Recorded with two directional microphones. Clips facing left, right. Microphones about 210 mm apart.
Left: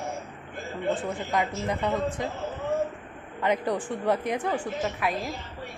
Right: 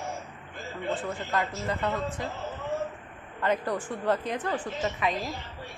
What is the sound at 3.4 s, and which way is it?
A woman's voice, 15° left (ahead or behind).